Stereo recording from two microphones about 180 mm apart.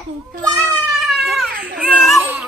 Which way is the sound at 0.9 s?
Centre (ahead or behind).